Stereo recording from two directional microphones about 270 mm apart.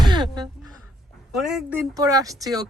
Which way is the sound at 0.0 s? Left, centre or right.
Centre.